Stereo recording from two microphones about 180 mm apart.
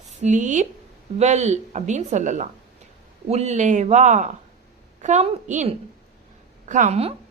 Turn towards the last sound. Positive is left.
turn(degrees=-35)  # may be behind; listen again after turning